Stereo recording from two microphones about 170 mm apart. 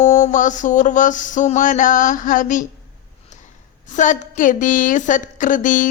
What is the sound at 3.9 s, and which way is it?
A woman's voice, 45° left (ahead or behind).